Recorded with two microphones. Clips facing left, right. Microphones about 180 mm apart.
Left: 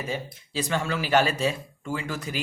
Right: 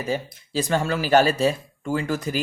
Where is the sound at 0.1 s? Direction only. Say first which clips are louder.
Right 5 dB; 40° right (ahead or behind).